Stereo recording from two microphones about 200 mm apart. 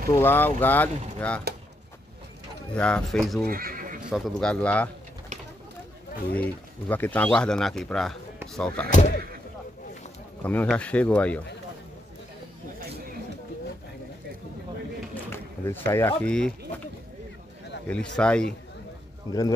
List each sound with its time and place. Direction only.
0.1 s speech: 10° left (ahead or behind)
2.7 s speech: 5° left (ahead or behind)
3.4 s neigh: 45° right (ahead or behind)
4.1 s speech: centre (ahead or behind)
6.3 s speech: 10° left (ahead or behind)
8.9 s speech: 40° left (ahead or behind)
10.4 s speech: 10° left (ahead or behind)
15.2 s speech: 10° left (ahead or behind)
17.8 s speech: 5° left (ahead or behind)
19.3 s speech: 20° left (ahead or behind)